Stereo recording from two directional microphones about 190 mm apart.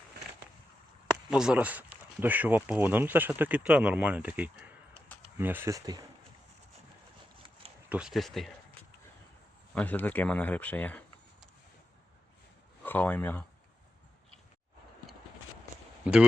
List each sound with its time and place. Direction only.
1.1 s speech: 5° right (ahead or behind); by 6.1 s 20° right (ahead or behind)
7.9 s speech: 5° right (ahead or behind)
9.7 s speech: 10° left (ahead or behind)
12.8 s speech: 10° left (ahead or behind)